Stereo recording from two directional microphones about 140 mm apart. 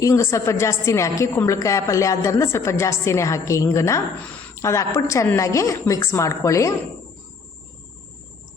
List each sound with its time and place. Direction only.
0.0 s a woman's voice: 20° left (ahead or behind)